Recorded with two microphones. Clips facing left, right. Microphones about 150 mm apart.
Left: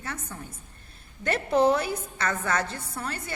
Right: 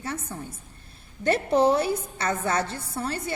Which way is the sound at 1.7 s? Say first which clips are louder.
Right 3 dB; 30° right (ahead or behind).